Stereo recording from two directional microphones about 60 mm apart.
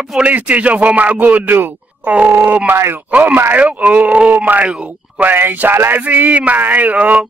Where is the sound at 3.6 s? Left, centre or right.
Right.